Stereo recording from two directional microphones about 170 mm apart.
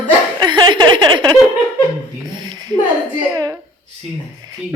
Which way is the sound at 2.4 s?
25° right (ahead or behind).